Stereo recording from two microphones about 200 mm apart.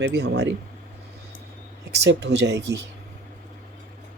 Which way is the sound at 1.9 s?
60° right (ahead or behind).